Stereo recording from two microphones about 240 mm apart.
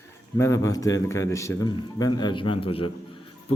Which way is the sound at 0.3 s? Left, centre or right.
Centre.